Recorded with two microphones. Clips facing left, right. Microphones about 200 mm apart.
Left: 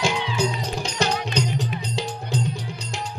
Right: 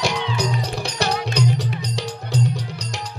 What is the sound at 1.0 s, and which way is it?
Music, 65° right (ahead or behind).